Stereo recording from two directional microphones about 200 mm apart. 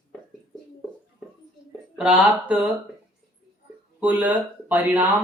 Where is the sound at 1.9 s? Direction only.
5° right (ahead or behind).